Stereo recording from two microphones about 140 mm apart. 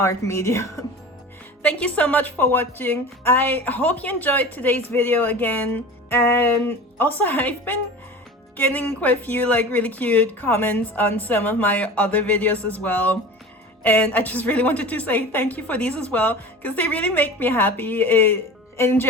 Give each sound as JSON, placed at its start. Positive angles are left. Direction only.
{"t": 0.0, "sound": "speech", "side_deg": 20}
{"t": 1.6, "sound": "speech", "side_deg": 10}